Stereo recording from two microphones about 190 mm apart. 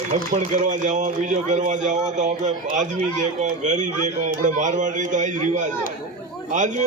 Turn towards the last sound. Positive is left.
turn(degrees=-40)  # may be behind; listen again after turning